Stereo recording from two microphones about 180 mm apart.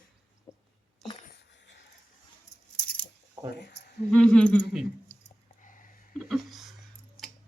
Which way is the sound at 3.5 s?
70° left (ahead or behind).